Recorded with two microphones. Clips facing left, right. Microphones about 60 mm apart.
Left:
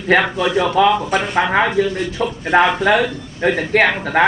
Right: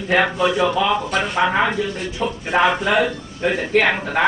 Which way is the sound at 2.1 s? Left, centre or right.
Left.